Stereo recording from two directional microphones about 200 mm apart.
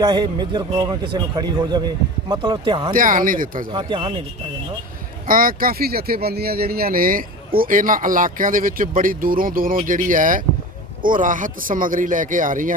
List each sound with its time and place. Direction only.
0.0 s a man's voice: 20° right (ahead or behind)
2.9 s speech: 40° right (ahead or behind)
3.7 s a man's voice: 25° right (ahead or behind)
5.2 s speech: 45° right (ahead or behind)